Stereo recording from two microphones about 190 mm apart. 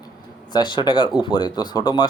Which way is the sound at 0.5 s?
25° left (ahead or behind).